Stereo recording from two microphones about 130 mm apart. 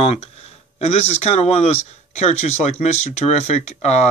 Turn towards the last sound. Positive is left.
turn(degrees=60)  # may be behind; listen again after turning